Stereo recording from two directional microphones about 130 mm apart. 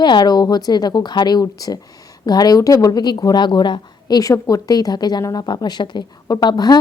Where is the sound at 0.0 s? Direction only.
35° left (ahead or behind).